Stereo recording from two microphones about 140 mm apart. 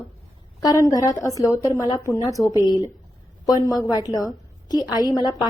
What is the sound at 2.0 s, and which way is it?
Speech, 20° right (ahead or behind).